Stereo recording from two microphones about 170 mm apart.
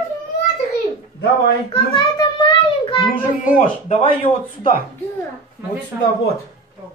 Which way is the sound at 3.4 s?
50° left (ahead or behind).